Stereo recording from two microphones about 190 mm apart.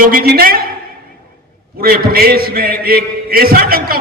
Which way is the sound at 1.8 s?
50° right (ahead or behind).